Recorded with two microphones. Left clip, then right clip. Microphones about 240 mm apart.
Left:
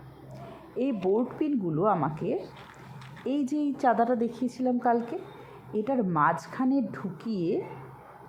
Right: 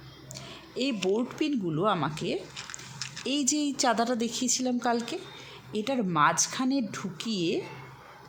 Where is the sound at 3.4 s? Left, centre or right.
Right.